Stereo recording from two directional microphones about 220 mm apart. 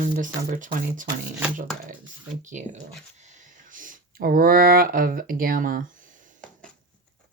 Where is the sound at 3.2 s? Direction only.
35° right (ahead or behind).